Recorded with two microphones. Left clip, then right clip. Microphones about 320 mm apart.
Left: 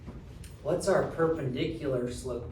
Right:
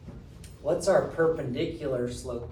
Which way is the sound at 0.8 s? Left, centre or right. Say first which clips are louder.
Right 3 dB; right.